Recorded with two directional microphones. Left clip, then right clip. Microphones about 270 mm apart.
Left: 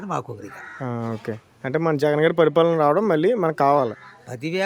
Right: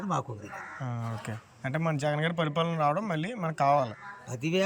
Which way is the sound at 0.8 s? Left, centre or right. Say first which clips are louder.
Left 9 dB; left.